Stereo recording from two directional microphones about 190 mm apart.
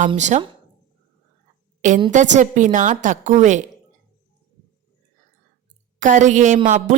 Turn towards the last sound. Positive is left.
turn(degrees=-40)  # may be behind; listen again after turning